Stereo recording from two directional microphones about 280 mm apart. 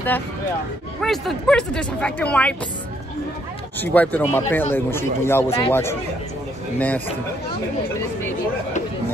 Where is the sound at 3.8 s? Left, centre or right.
Centre.